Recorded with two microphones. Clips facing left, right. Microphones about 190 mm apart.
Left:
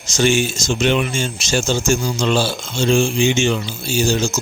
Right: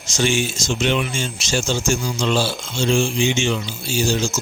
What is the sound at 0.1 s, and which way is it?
Speech, 45° left (ahead or behind).